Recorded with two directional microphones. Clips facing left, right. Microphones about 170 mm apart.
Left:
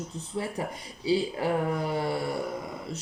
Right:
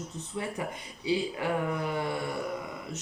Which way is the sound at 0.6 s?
35° left (ahead or behind).